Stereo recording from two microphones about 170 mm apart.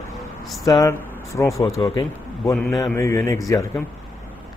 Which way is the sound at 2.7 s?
20° left (ahead or behind).